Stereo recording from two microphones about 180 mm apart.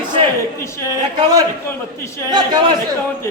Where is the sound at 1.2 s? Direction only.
20° right (ahead or behind).